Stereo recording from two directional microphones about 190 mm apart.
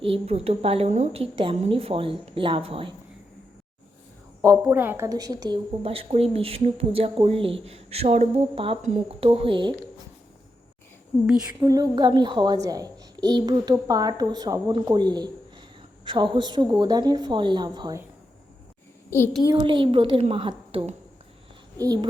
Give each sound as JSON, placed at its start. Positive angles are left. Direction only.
{"t": 0.0, "sound": "a woman's voice", "side_deg": -30}
{"t": 4.4, "sound": "a woman's voice", "side_deg": -10}
{"t": 11.6, "sound": "a woman's voice", "side_deg": -20}
{"t": 19.5, "sound": "a woman's voice", "side_deg": -25}